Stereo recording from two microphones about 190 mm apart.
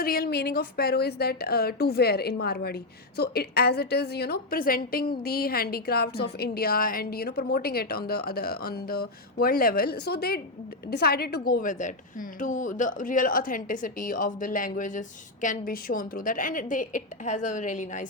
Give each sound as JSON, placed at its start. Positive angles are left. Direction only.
{"t": 0.0, "sound": "a woman's voice", "side_deg": 50}